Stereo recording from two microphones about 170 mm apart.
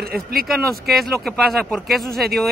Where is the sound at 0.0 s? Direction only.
60° right (ahead or behind).